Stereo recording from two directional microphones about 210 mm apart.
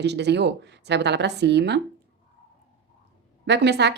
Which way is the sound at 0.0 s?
55° right (ahead or behind).